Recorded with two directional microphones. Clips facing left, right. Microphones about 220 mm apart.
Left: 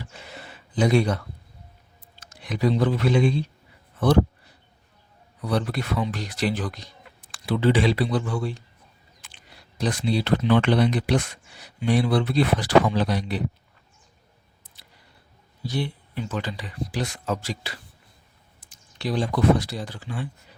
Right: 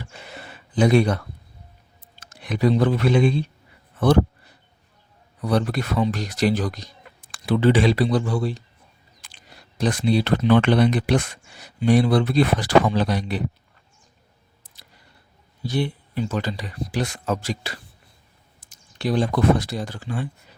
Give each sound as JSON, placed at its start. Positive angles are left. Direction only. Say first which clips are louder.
{"t": 0.0, "sound": "gasp", "louder": "right 2 dB", "side_deg": -60}
{"t": 2.4, "sound": "speech", "louder": "right 3 dB", "side_deg": -60}
{"t": 5.4, "sound": "speech", "louder": "right 4 dB", "side_deg": -45}
{"t": 11.8, "sound": "speech", "louder": "right 4 dB", "side_deg": -45}
{"t": 15.6, "sound": "speech", "louder": "right 4 dB", "side_deg": -55}
{"t": 16.1, "sound": "speech", "louder": "right 4 dB", "side_deg": -40}